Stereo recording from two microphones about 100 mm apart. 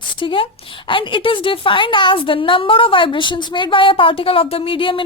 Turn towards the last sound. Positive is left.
turn(degrees=60)  # may be behind; listen again after turning